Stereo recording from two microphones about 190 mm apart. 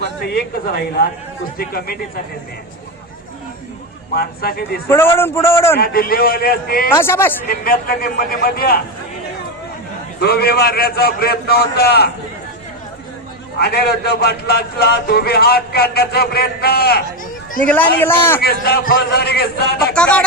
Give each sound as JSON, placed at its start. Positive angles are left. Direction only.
{"t": 0.2, "sound": "a man's voice", "side_deg": 55}
{"t": 4.1, "sound": "a man's voice", "side_deg": 55}
{"t": 4.9, "sound": "a man's voice", "side_deg": 10}
{"t": 5.8, "sound": "a man's voice", "side_deg": 50}
{"t": 6.9, "sound": "a man's voice", "side_deg": 15}
{"t": 7.4, "sound": "a man's voice", "side_deg": 50}
{"t": 10.2, "sound": "a man's voice", "side_deg": 55}
{"t": 13.6, "sound": "a man's voice", "side_deg": 55}
{"t": 17.6, "sound": "a man's voice", "side_deg": 10}
{"t": 18.3, "sound": "a man's voice", "side_deg": 55}
{"t": 19.9, "sound": "music", "side_deg": 5}